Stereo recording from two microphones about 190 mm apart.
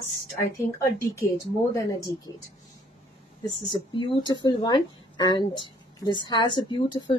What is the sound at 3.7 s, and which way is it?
Speech, 25° left (ahead or behind).